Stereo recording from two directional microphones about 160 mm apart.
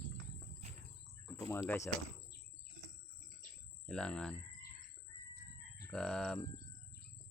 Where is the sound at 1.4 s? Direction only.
15° left (ahead or behind).